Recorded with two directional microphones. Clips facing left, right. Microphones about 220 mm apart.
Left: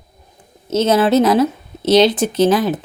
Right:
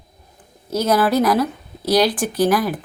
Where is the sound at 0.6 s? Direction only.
25° left (ahead or behind).